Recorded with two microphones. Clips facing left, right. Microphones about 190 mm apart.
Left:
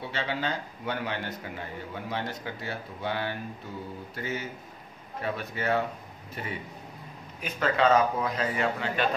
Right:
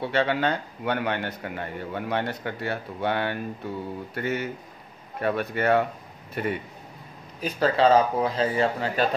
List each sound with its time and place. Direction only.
0.0 s a man's voice: 60° right (ahead or behind)
7.3 s a man's voice: 35° right (ahead or behind)